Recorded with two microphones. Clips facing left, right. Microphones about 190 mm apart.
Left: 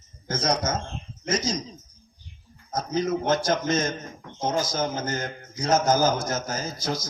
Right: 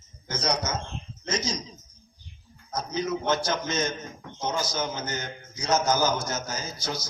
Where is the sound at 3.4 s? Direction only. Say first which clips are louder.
Left 4 dB; 50° left (ahead or behind).